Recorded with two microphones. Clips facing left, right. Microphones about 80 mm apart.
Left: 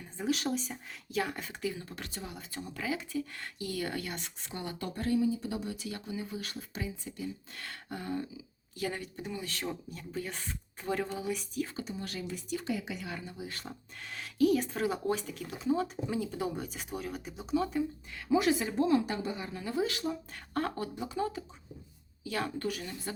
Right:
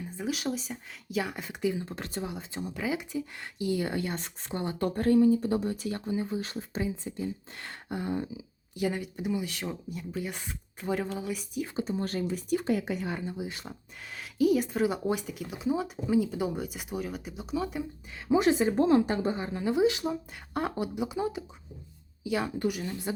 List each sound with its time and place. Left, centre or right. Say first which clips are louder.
0.2 s speech: left 1 dB; centre; by 2.2 s right
2.2 s speech: right 6 dB; right
4.2 s speech: right 6 dB; right
4.9 s speech: right 7 dB; right; by 11.7 s centre
11.8 s speech: right 8 dB; right
13.1 s speech: right 6 dB; right
14.1 s speech: right 2 dB; centre
18.3 s speech: right 4 dB; right
19.7 s speech: right 6 dB; centre